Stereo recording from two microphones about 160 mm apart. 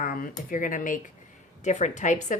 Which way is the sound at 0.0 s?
60° left (ahead or behind).